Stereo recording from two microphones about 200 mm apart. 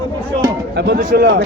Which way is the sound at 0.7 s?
60° right (ahead or behind).